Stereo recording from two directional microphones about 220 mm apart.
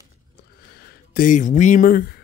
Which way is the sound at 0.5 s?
45° left (ahead or behind).